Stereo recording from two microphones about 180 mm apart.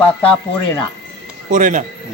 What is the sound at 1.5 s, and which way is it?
Speech, 45° right (ahead or behind).